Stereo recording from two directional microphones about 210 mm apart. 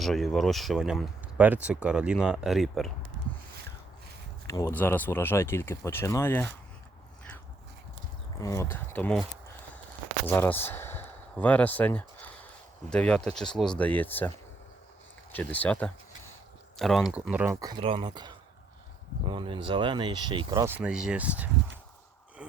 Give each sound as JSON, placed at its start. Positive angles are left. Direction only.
{"t": 0.0, "sound": "speech", "side_deg": 0}
{"t": 4.4, "sound": "speech", "side_deg": 15}
{"t": 8.4, "sound": "speech", "side_deg": 15}
{"t": 10.2, "sound": "a sound", "side_deg": 10}
{"t": 12.9, "sound": "speech", "side_deg": 5}
{"t": 15.3, "sound": "speech", "side_deg": 10}
{"t": 20.7, "sound": "speech", "side_deg": -5}